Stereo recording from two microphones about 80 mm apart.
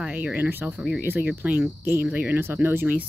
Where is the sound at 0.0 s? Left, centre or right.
Centre.